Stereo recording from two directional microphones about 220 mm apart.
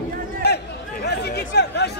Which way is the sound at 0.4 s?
45° left (ahead or behind).